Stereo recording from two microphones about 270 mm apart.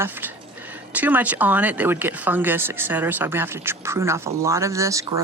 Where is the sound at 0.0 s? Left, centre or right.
Centre.